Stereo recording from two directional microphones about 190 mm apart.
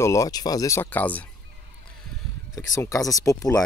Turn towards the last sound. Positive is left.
turn(degrees=15)  # may be behind; listen again after turning